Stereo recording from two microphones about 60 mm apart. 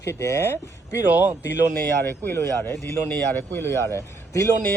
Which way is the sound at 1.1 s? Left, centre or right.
Right.